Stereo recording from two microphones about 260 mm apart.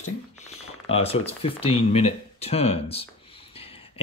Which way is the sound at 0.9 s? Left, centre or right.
Left.